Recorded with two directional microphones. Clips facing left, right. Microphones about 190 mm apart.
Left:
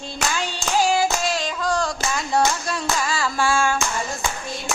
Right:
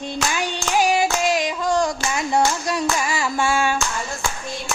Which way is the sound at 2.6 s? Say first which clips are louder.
Right 3 dB; 15° right (ahead or behind).